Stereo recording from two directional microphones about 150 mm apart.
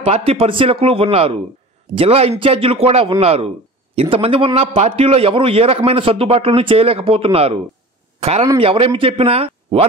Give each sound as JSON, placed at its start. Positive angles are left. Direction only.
{"t": 0.0, "sound": "a man's voice", "side_deg": -40}